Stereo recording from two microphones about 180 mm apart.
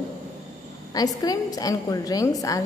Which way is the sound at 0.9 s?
20° left (ahead or behind).